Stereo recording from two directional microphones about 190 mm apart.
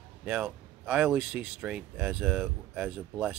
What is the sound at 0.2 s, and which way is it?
Speech, 5° right (ahead or behind).